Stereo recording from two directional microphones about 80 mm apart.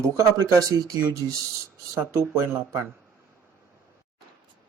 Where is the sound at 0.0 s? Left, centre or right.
Right.